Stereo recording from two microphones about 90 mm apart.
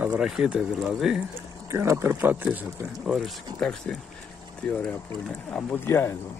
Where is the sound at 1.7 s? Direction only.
30° right (ahead or behind).